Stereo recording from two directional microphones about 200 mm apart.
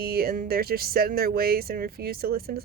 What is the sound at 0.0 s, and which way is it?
Speech, 50° right (ahead or behind).